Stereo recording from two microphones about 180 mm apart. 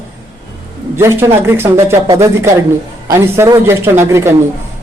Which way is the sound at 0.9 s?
15° right (ahead or behind).